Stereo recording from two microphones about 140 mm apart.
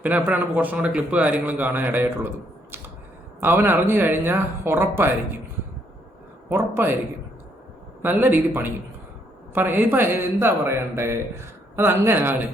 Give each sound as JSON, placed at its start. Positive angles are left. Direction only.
{"t": 0.0, "sound": "a man's voice", "side_deg": -10}
{"t": 3.4, "sound": "a man's voice", "side_deg": -15}
{"t": 6.5, "sound": "a man's voice", "side_deg": -15}
{"t": 8.0, "sound": "a man's voice", "side_deg": -15}